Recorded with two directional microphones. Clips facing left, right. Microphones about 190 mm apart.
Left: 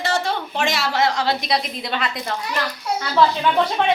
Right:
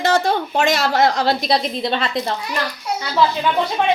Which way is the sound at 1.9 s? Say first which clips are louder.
Right 2 dB; 25° right (ahead or behind).